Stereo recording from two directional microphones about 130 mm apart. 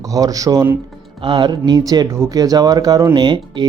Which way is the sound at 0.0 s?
25° right (ahead or behind).